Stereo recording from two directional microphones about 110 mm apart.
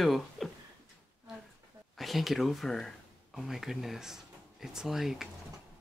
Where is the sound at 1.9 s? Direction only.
Centre (ahead or behind).